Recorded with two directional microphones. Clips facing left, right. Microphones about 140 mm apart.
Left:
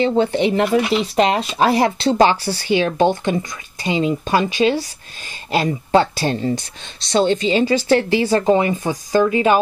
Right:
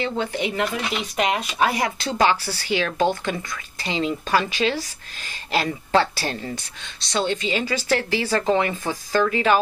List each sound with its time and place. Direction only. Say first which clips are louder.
0.0 s speech: left 9 dB; 30° left (ahead or behind)